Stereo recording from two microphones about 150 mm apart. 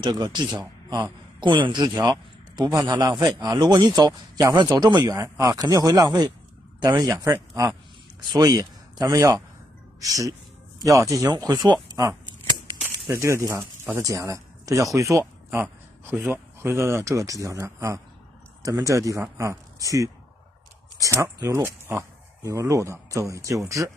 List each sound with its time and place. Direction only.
0.0 s a man's voice: 30° right (ahead or behind)